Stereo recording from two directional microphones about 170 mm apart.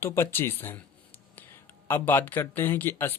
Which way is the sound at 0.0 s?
15° left (ahead or behind).